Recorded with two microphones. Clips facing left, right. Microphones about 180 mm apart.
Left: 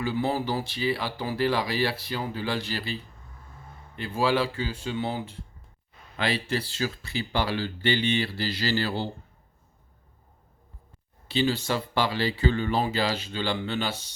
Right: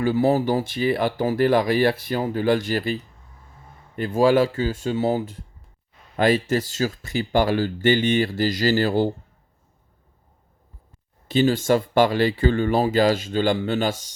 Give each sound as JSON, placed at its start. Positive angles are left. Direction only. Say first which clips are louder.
{"t": 0.0, "sound": "speech", "louder": "right 8 dB", "side_deg": -45}
{"t": 11.3, "sound": "speech", "louder": "right 7 dB", "side_deg": -45}